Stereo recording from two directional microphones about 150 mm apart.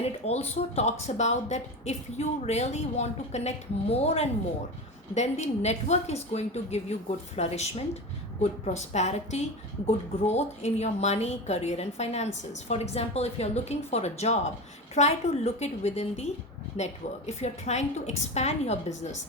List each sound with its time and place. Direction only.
0.0 s a woman's voice: 45° left (ahead or behind)